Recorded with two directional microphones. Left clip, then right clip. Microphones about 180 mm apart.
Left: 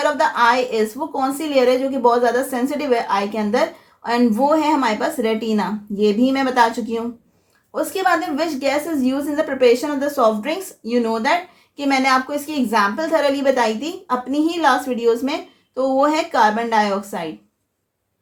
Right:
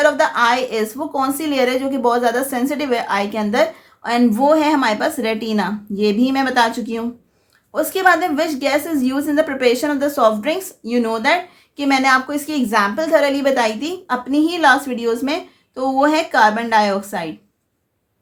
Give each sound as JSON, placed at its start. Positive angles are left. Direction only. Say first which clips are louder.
{"t": 0.0, "sound": "a woman's voice", "louder": "right 2 dB", "side_deg": -45}